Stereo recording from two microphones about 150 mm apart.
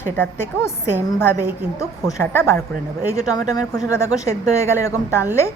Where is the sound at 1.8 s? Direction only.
20° left (ahead or behind).